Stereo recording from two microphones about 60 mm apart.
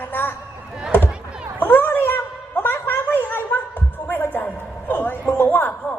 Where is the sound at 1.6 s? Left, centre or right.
Left.